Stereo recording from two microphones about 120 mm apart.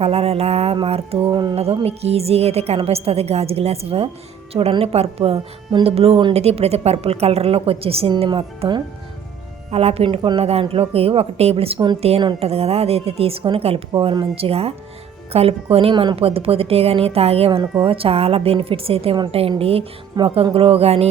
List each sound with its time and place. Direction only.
0.0 s a woman's voice: 55° right (ahead or behind)
1.3 s speech: 40° right (ahead or behind)
1.5 s a woman's voice: 55° right (ahead or behind)
8.3 s a woman's voice: 45° right (ahead or behind)
9.7 s a woman's voice: 55° right (ahead or behind)